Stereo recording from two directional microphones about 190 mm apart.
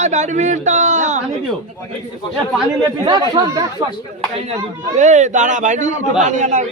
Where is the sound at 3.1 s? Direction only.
20° right (ahead or behind).